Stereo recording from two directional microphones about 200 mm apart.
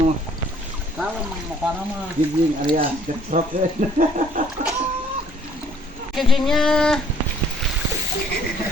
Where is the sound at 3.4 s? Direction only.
45° right (ahead or behind).